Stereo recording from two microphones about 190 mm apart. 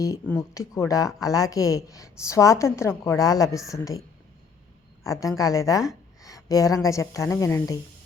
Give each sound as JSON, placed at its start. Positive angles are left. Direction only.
{"t": 0.3, "sound": "speech", "side_deg": 15}
{"t": 5.0, "sound": "speech", "side_deg": 15}